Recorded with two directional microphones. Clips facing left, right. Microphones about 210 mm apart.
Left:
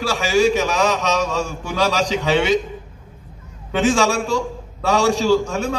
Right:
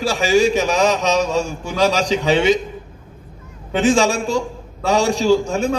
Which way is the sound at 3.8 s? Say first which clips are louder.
Right 2 dB; 15° right (ahead or behind).